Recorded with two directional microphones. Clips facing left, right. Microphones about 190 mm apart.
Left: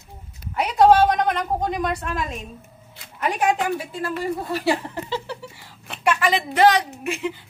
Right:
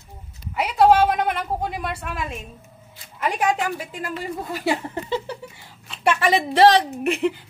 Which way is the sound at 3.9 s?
15° right (ahead or behind).